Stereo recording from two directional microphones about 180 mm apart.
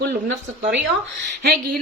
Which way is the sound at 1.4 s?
60° right (ahead or behind).